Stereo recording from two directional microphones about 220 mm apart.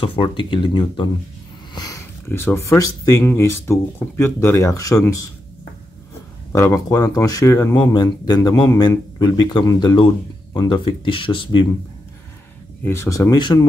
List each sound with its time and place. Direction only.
0.0 s speech: 25° left (ahead or behind)
6.5 s speech: 15° left (ahead or behind)
12.8 s speech: 10° left (ahead or behind)